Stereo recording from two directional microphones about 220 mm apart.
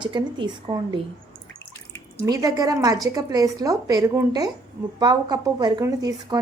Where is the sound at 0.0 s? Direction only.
20° right (ahead or behind).